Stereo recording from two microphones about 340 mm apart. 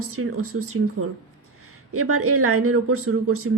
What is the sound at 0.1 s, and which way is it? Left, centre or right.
Speech, right.